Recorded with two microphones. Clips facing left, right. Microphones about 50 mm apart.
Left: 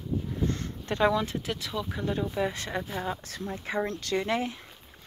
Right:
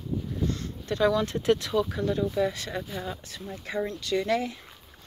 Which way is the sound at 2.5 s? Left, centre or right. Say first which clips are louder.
Left 1 dB; left.